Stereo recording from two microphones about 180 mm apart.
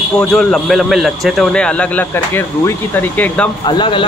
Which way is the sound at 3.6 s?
25° left (ahead or behind).